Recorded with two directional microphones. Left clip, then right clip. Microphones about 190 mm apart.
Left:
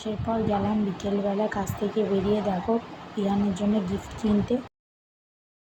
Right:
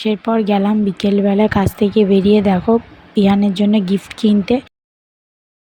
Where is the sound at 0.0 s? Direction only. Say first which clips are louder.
Right 11 dB; 50° right (ahead or behind).